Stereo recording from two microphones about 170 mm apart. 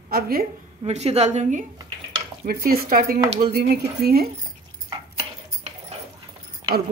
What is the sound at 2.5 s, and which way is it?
A woman's voice, 60° right (ahead or behind).